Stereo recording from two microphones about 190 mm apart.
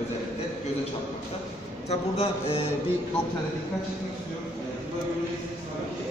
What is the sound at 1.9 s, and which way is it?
Speech, 30° left (ahead or behind).